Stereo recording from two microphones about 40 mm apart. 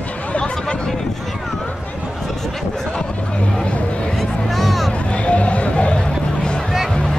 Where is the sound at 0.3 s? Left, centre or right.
Left.